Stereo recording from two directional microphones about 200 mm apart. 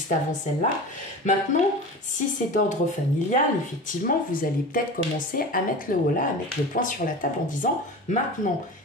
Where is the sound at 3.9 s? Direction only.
45° left (ahead or behind).